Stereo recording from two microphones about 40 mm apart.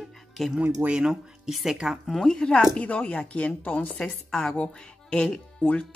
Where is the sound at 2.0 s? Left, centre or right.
Centre.